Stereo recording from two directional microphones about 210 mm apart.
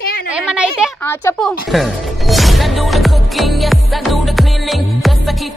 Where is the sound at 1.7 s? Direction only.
Centre (ahead or behind).